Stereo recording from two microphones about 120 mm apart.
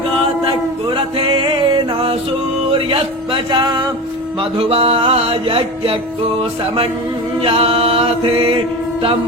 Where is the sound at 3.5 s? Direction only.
35° right (ahead or behind).